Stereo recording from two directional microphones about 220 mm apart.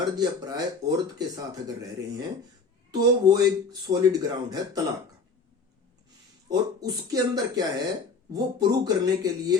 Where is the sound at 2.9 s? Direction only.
20° right (ahead or behind).